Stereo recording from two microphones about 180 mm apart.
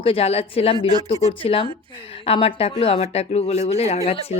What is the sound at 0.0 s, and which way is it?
A woman's voice, 30° left (ahead or behind).